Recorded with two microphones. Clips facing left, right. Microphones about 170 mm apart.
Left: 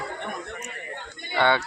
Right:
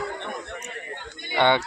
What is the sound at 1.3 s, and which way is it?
Speech, 15° right (ahead or behind).